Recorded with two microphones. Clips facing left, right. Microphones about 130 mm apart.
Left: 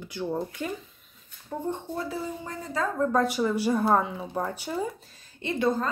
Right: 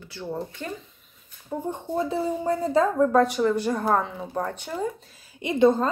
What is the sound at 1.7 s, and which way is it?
A woman's voice, 20° right (ahead or behind).